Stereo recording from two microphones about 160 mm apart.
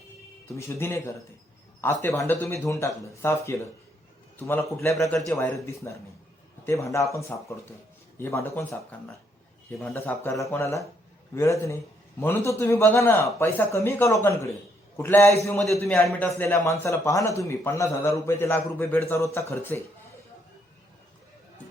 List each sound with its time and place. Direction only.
0.4 s a man's voice: 15° left (ahead or behind)
16.0 s a man's voice: 5° left (ahead or behind)